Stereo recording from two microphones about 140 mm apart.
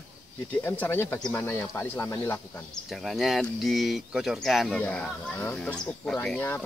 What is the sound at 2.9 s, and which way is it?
Speech, centre (ahead or behind).